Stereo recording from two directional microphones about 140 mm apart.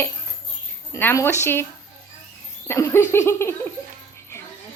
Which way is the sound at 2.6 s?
20° left (ahead or behind).